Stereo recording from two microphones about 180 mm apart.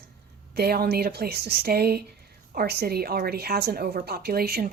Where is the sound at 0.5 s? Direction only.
60° right (ahead or behind).